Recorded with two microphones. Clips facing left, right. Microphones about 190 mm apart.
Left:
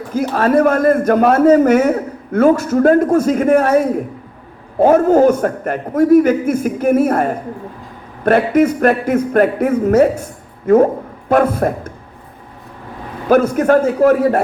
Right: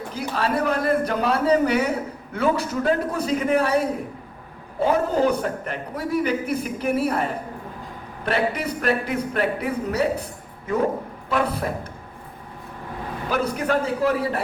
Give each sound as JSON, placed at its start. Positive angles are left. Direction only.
{"t": 0.1, "sound": "a man's voice", "side_deg": 50}
{"t": 4.8, "sound": "a man's voice", "side_deg": 50}
{"t": 11.3, "sound": "a man's voice", "side_deg": 50}
{"t": 13.2, "sound": "a man's voice", "side_deg": 45}